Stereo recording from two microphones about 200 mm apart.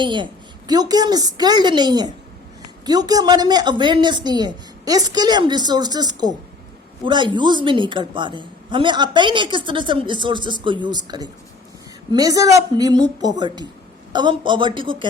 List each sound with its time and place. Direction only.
0.0 s a woman's voice: 25° right (ahead or behind)